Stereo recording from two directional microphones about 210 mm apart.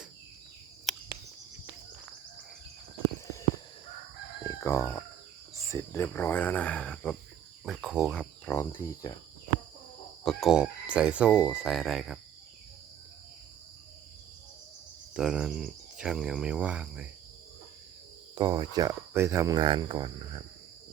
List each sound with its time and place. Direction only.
0.9 s cricket: centre (ahead or behind)
4.4 s chicken: 15° left (ahead or behind)
5.6 s speech: 15° left (ahead or behind)
10.2 s speech: centre (ahead or behind)
15.1 s speech: 5° right (ahead or behind)
18.3 s cricket: 20° right (ahead or behind)